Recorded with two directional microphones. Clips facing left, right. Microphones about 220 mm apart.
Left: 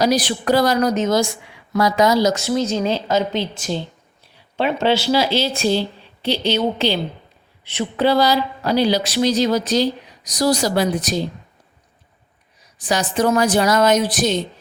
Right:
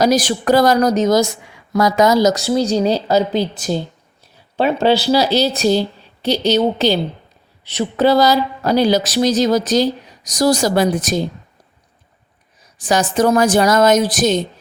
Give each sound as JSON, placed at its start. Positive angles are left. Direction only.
{"t": 0.0, "sound": "a woman's voice", "side_deg": -45}
{"t": 12.8, "sound": "a woman's voice", "side_deg": -45}